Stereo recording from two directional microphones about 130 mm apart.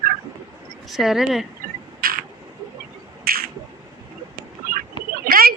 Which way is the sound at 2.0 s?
90° right.